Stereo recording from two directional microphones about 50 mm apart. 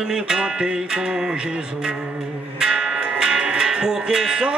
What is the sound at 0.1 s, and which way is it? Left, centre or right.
Music, centre.